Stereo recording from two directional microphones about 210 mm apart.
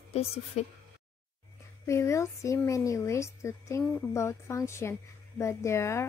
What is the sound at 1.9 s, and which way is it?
A woman's voice, 15° left (ahead or behind).